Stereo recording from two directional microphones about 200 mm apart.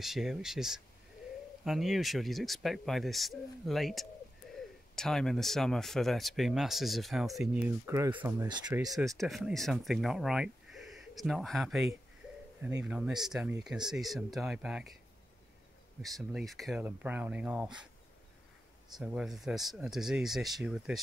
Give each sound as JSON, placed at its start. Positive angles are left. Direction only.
{"t": 0.0, "sound": "speech", "side_deg": 0}
{"t": 9.1, "sound": "speech", "side_deg": 0}
{"t": 16.0, "sound": "speech", "side_deg": 0}
{"t": 18.9, "sound": "speech", "side_deg": 0}